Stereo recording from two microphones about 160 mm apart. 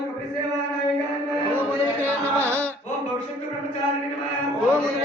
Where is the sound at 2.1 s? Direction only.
15° right (ahead or behind).